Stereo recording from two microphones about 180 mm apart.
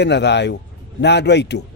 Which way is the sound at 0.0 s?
70° left (ahead or behind).